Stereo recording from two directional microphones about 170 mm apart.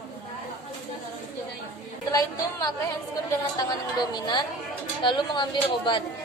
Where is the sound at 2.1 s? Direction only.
20° left (ahead or behind).